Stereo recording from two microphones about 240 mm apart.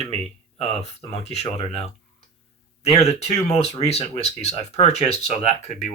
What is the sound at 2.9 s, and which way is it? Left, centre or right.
Speech, left.